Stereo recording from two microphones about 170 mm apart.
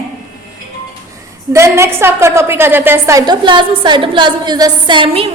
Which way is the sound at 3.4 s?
30° right (ahead or behind).